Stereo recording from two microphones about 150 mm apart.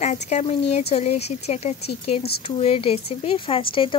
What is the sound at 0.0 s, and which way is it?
Speech, 50° left (ahead or behind).